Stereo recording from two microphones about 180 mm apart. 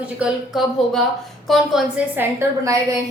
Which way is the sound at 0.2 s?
Centre (ahead or behind).